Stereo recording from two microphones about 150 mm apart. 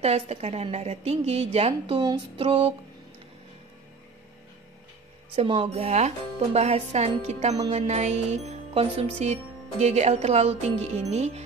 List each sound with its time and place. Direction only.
0.0 s music: 45° right (ahead or behind)
5.3 s music: 40° right (ahead or behind)